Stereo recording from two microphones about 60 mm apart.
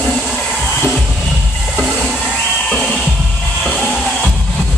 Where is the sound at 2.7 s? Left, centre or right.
Centre.